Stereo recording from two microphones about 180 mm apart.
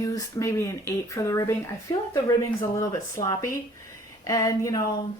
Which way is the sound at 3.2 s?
20° left (ahead or behind).